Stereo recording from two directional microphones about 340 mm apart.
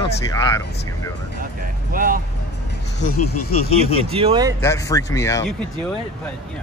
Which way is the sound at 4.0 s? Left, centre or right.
Centre.